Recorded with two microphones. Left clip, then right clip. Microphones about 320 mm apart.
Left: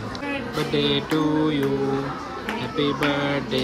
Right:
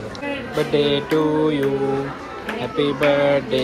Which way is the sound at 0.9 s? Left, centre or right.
Centre.